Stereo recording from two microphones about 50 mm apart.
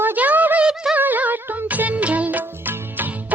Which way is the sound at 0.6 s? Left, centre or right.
Centre.